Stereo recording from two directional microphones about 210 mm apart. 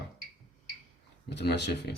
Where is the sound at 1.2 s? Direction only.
55° left (ahead or behind).